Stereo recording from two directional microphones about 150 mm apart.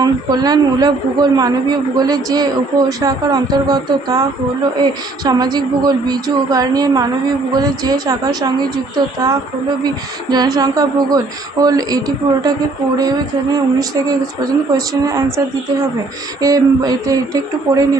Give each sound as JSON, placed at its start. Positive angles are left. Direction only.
{"t": 0.0, "sound": "speech", "side_deg": -25}
{"t": 9.8, "sound": "speech", "side_deg": -25}
{"t": 16.4, "sound": "speech", "side_deg": -25}